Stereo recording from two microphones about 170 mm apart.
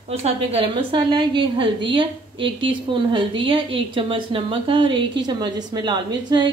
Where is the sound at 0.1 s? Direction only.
35° right (ahead or behind).